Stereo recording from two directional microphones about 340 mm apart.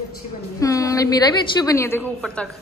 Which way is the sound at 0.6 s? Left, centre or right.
Centre.